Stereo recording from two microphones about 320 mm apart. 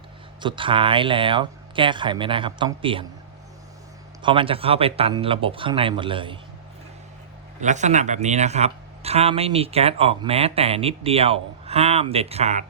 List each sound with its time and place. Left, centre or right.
0.4 s speech: centre
4.2 s speech: centre
7.6 s speech: right